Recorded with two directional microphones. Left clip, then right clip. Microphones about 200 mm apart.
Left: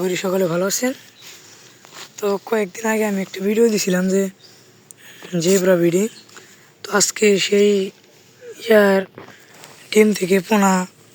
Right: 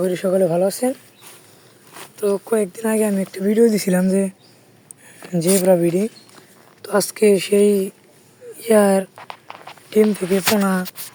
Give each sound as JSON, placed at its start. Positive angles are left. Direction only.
{"t": 0.0, "sound": "speech", "side_deg": -5}
{"t": 2.1, "sound": "speech", "side_deg": 0}
{"t": 2.5, "sound": "speech", "side_deg": -10}
{"t": 5.6, "sound": "speech", "side_deg": 0}
{"t": 9.9, "sound": "speech", "side_deg": 5}